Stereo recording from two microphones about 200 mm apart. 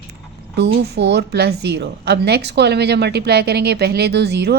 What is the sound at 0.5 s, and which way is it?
A woman's voice, 60° right (ahead or behind).